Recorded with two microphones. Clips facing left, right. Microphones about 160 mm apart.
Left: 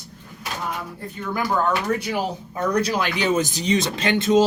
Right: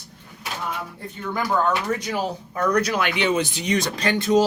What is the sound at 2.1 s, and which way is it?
Speech, 20° left (ahead or behind).